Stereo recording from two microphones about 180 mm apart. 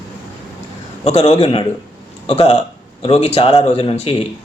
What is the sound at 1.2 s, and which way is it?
Speech, 25° left (ahead or behind).